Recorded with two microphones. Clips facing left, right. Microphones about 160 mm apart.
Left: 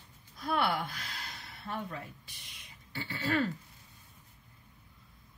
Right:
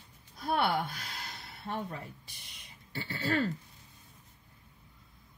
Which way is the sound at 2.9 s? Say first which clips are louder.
Even; 40° right (ahead or behind).